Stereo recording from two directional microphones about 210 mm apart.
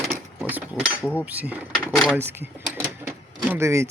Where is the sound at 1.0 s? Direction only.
10° left (ahead or behind).